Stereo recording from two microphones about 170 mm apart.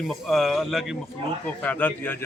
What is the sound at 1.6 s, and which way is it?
Speech, 10° left (ahead or behind).